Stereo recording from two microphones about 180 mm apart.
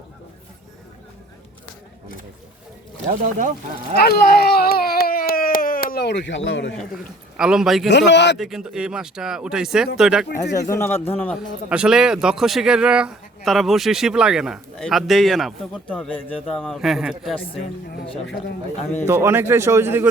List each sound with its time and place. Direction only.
3.1 s speech: 45° right (ahead or behind)
3.9 s a sound: 60° left (ahead or behind); by 6.7 s 90° left
7.3 s a man's voice: 5° right (ahead or behind)
7.9 s a man's voice: 75° left (ahead or behind)
8.4 s a man's voice: centre (ahead or behind)
10.5 s speech: 15° left (ahead or behind)
11.7 s a man's voice: 5° right (ahead or behind)
19.0 s speech: 15° right (ahead or behind)